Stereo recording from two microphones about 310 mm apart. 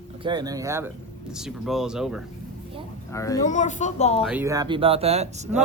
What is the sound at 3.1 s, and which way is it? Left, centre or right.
Speech, centre.